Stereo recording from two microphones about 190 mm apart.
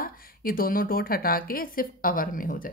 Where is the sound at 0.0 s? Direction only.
50° left (ahead or behind).